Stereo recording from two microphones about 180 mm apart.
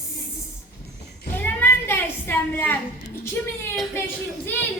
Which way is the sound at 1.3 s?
10° left (ahead or behind).